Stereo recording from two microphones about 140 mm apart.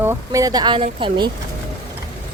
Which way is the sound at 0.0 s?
20° right (ahead or behind).